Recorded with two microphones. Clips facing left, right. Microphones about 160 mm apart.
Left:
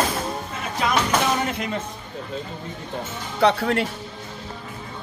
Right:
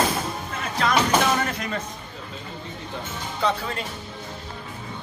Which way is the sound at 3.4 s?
70° left (ahead or behind).